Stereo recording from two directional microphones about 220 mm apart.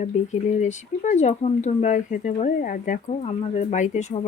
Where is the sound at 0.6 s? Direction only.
35° left (ahead or behind).